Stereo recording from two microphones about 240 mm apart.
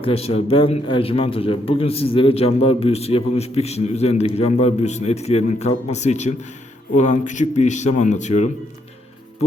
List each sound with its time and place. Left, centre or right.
0.0 s a man's voice: left